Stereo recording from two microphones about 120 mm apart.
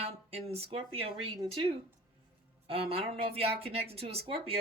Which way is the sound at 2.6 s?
55° right (ahead or behind).